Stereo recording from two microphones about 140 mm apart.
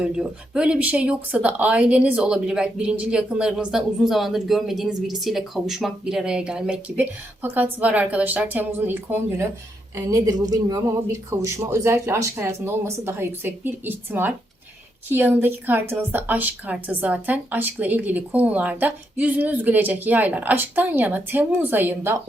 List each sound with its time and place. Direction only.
0.0 s speech: 5° right (ahead or behind)
9.9 s speech: 25° right (ahead or behind)